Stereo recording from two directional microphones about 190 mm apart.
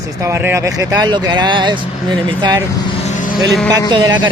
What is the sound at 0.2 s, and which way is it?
Speech, 15° right (ahead or behind).